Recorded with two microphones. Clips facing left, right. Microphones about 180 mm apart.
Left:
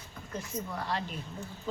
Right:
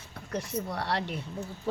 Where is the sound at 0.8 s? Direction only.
75° right (ahead or behind).